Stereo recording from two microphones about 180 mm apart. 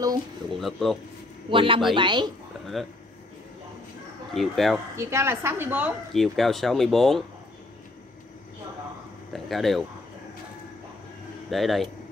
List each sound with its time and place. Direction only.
0.5 s speech: centre (ahead or behind)
1.5 s a woman's voice: 30° right (ahead or behind)
2.8 s speech: centre (ahead or behind)
4.3 s speech: centre (ahead or behind)
4.9 s a woman's voice: 15° right (ahead or behind)
6.1 s speech: centre (ahead or behind)
9.3 s speech: centre (ahead or behind)
11.5 s speech: centre (ahead or behind)